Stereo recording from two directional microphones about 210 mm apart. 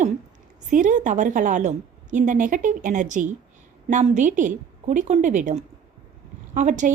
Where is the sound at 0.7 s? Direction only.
35° right (ahead or behind).